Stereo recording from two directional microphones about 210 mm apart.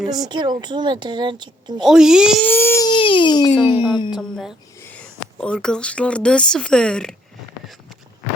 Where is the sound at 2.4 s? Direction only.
10° left (ahead or behind).